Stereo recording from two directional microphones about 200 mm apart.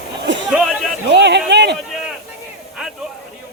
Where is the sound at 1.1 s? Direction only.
60° right (ahead or behind).